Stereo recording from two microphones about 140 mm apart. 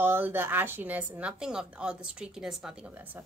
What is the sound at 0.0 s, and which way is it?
A woman's voice, 15° right (ahead or behind).